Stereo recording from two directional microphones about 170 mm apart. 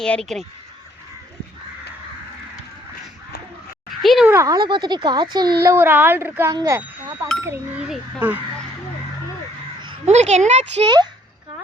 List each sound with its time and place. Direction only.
0.0 s speech: 5° left (ahead or behind)
4.0 s speech: centre (ahead or behind)
4.3 s speech: 20° right (ahead or behind)
5.6 s speech: 15° right (ahead or behind)
7.9 s speech: centre (ahead or behind)
10.1 s speech: 40° right (ahead or behind)
10.8 s speech: 25° right (ahead or behind)